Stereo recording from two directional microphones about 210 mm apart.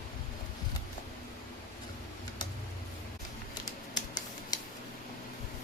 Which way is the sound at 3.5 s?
20° left (ahead or behind).